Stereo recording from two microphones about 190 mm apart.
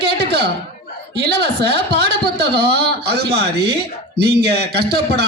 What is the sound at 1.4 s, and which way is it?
A man's voice, 60° right (ahead or behind).